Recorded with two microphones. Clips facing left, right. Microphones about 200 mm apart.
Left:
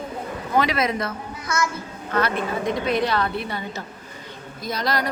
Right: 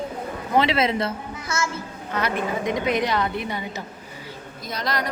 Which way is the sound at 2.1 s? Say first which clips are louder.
Left 2 dB; 15° right (ahead or behind).